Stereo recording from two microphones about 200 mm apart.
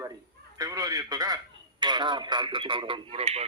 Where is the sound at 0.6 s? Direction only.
20° right (ahead or behind).